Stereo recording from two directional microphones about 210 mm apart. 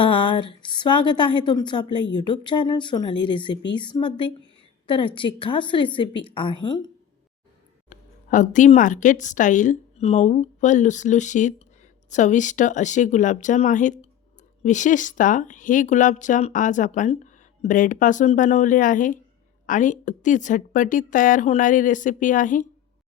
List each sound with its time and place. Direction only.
0.0 s a woman's voice: 25° left (ahead or behind)
7.9 s a woman's voice: 35° left (ahead or behind)